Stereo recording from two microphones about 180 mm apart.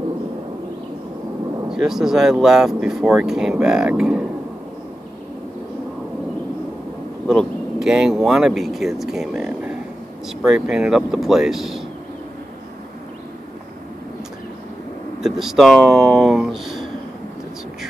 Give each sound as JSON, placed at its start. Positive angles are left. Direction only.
{"t": 1.7, "sound": "speech", "side_deg": 0}
{"t": 7.2, "sound": "speech", "side_deg": 0}
{"t": 15.2, "sound": "speech", "side_deg": 0}